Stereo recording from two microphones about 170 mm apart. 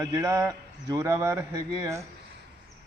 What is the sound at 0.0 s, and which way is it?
A man's voice, 20° right (ahead or behind).